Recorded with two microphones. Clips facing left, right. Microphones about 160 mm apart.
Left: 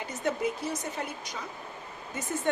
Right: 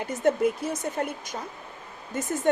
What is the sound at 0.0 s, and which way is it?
A woman's voice, 50° right (ahead or behind).